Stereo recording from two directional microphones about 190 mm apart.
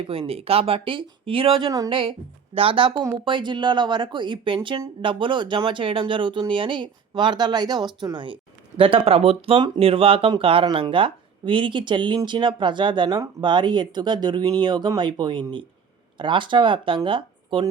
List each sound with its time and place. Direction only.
0.0 s speech: 30° right (ahead or behind)